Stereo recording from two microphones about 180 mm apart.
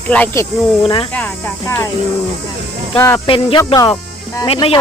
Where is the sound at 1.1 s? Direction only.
10° left (ahead or behind).